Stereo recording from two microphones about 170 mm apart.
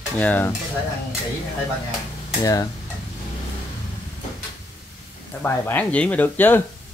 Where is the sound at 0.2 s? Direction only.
10° left (ahead or behind).